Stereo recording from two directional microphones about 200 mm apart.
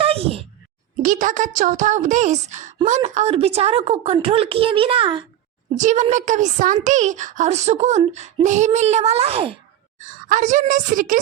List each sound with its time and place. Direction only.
0.0 s a sound: 30° right (ahead or behind)
1.0 s a woman's voice: 40° right (ahead or behind)
5.7 s a woman's voice: 35° right (ahead or behind)
10.0 s a woman's voice: 40° right (ahead or behind)